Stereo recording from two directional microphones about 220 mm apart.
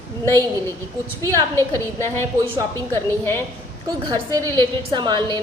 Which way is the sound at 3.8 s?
15° right (ahead or behind).